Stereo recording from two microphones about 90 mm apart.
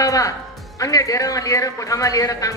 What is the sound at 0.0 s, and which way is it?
Music, 40° left (ahead or behind).